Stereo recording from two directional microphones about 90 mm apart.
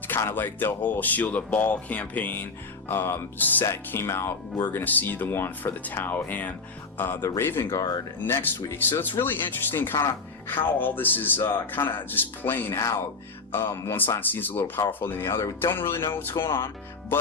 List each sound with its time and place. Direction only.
0.1 s speech: 25° left (ahead or behind)